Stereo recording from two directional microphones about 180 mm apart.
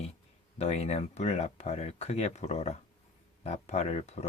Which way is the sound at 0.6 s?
35° left (ahead or behind).